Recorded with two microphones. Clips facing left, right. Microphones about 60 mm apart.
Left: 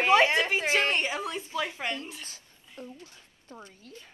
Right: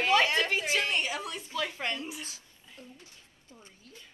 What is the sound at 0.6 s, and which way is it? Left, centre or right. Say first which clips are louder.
A woman's voice: left 4 dB; left.